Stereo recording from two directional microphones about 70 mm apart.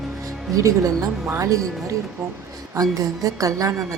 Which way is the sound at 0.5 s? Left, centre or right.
Right.